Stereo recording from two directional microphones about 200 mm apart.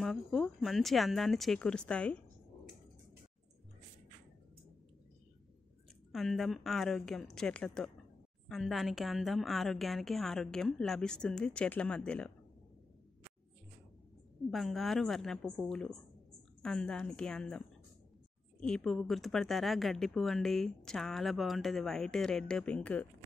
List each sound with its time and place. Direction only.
0.0 s speech: 5° left (ahead or behind)
6.1 s speech: centre (ahead or behind)
14.5 s speech: centre (ahead or behind)